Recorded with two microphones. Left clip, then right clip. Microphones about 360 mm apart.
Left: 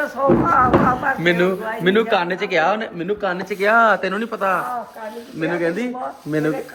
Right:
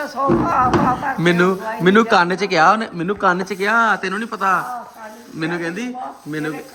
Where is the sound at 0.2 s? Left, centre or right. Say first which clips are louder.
Left 1 dB; centre.